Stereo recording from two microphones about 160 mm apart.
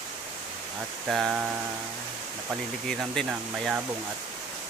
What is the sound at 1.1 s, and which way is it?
Speech, 5° right (ahead or behind).